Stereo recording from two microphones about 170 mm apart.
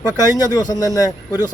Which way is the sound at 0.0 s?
20° left (ahead or behind).